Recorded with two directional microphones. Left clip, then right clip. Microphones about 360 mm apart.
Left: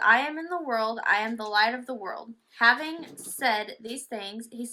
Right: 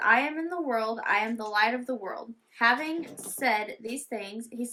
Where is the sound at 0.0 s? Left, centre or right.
Centre.